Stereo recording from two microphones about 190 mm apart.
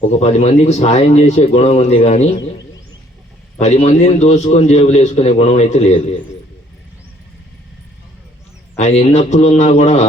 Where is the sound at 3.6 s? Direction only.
35° left (ahead or behind).